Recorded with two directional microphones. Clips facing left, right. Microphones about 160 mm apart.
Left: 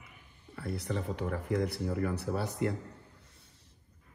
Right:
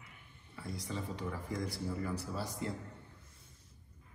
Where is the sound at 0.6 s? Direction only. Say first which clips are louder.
Left 6 dB; 65° left (ahead or behind).